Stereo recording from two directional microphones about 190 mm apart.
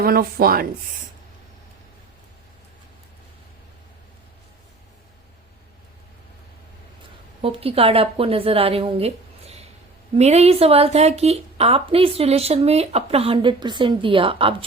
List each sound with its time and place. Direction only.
0.0 s speech: 55° right (ahead or behind)
7.4 s a woman's voice: 30° right (ahead or behind)